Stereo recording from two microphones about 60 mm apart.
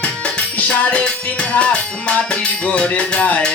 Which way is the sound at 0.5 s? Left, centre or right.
Left.